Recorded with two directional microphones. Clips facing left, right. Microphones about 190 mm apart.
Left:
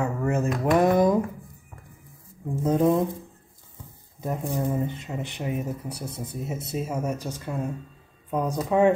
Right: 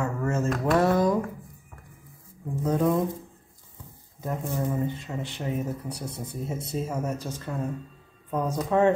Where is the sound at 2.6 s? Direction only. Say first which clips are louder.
Left 3 dB; 20° left (ahead or behind).